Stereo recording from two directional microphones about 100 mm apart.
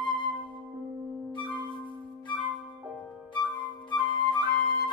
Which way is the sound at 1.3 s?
50° left (ahead or behind).